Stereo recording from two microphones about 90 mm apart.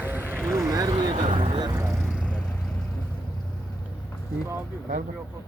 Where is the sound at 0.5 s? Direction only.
40° right (ahead or behind).